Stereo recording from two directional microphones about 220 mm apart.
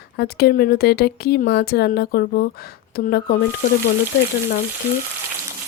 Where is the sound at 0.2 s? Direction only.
45° left (ahead or behind).